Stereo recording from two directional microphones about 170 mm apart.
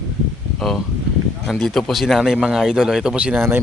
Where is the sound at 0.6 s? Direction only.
Centre (ahead or behind).